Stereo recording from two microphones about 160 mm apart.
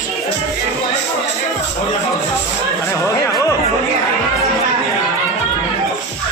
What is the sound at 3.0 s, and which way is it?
Speech, 20° left (ahead or behind).